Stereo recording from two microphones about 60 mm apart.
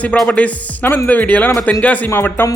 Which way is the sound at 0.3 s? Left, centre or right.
Left.